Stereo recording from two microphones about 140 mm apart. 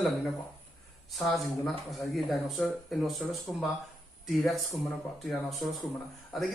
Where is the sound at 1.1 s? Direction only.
Centre (ahead or behind).